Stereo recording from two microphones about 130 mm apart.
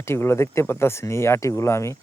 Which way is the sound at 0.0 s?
20° left (ahead or behind).